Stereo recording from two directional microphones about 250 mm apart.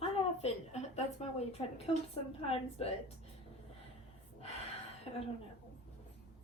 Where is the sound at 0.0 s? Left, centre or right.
Left.